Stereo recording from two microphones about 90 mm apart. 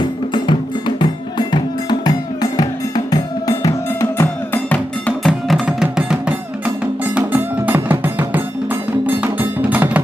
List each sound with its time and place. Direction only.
0.3 s music: 60° left (ahead or behind); by 4.3 s 35° left (ahead or behind)
5.2 s music: centre (ahead or behind)